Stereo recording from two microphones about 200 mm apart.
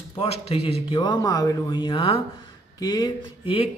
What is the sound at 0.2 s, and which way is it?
Speech, 30° left (ahead or behind).